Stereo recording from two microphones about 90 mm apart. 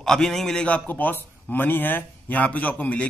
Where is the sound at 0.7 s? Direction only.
20° left (ahead or behind).